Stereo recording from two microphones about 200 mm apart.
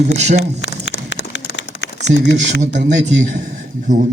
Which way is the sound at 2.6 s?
35° right (ahead or behind).